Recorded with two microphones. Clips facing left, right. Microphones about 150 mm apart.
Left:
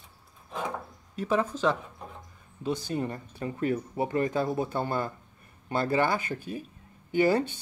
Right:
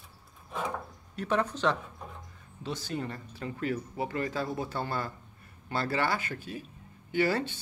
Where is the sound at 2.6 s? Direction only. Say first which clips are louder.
Left 5 dB; 15° left (ahead or behind).